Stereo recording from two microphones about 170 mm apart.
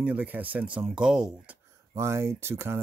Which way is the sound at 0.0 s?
10° right (ahead or behind).